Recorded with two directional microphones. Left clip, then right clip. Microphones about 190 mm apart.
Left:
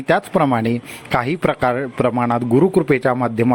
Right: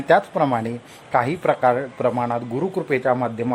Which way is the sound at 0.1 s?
20° left (ahead or behind).